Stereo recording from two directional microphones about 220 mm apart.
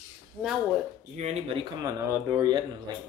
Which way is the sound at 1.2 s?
30° right (ahead or behind).